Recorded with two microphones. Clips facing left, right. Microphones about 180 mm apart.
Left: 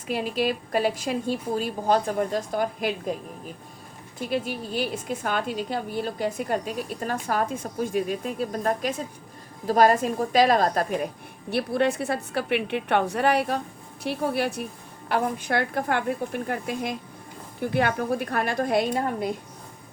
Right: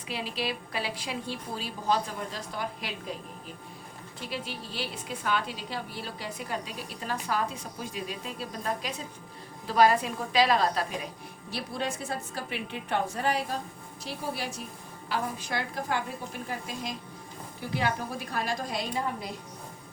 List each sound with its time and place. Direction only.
0.1 s a woman's voice: 50° left (ahead or behind)
4.3 s a woman's voice: 50° left (ahead or behind)
11.5 s a woman's voice: 60° left (ahead or behind)